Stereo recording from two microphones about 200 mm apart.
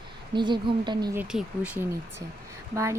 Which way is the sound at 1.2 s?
5° right (ahead or behind).